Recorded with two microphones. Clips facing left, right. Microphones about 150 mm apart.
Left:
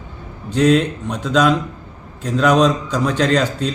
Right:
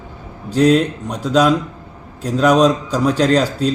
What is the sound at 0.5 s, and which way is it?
Speech, 35° right (ahead or behind).